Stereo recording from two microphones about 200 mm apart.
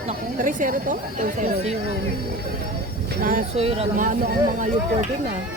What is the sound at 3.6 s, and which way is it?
Speech, 30° right (ahead or behind).